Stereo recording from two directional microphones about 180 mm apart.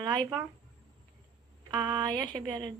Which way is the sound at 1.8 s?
25° right (ahead or behind).